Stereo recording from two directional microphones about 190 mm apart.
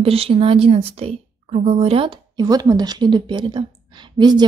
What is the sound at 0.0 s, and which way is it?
Speech, 30° right (ahead or behind).